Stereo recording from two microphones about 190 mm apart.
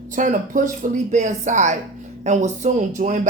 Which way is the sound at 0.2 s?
45° right (ahead or behind).